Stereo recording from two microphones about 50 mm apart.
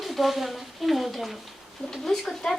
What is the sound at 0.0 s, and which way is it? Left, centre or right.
A woman's voice, centre.